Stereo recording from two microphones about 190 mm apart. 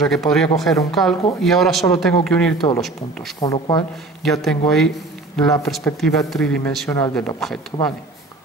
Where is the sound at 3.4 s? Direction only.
20° left (ahead or behind).